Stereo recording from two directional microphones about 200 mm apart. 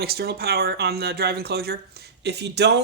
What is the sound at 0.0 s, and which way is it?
Speech, 50° right (ahead or behind).